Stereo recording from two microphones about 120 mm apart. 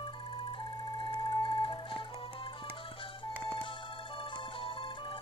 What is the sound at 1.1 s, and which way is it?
Music, 35° left (ahead or behind).